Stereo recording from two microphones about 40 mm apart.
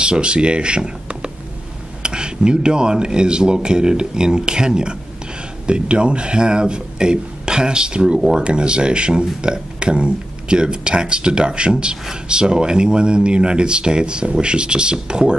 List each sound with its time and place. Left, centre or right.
0.0 s speech: right